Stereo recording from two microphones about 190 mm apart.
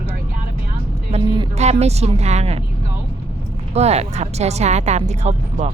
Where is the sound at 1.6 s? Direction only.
35° right (ahead or behind).